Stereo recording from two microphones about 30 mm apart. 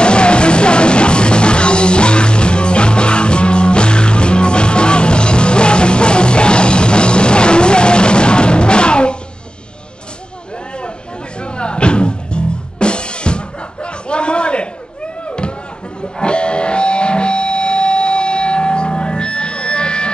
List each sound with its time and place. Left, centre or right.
0.0 s music: left
11.4 s music: left
13.8 s a sound: left
16.2 s music: left